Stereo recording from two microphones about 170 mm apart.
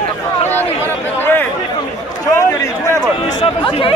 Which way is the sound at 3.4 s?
30° left (ahead or behind).